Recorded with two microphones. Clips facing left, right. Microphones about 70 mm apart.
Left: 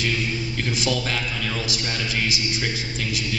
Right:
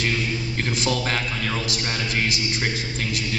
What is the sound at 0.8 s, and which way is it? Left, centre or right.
A man's voice, right.